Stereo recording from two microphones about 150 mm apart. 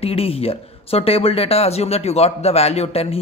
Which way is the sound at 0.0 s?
40° left (ahead or behind).